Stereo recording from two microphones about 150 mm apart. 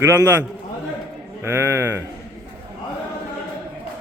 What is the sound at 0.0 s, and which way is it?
Speech, 20° right (ahead or behind).